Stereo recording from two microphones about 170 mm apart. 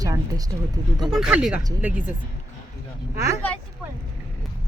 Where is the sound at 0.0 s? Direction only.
20° right (ahead or behind).